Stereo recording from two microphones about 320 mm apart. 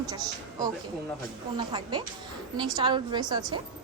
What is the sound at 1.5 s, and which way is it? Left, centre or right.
A woman's voice, centre.